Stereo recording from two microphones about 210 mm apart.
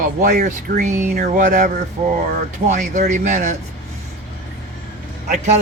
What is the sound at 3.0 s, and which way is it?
Speech, 35° right (ahead or behind).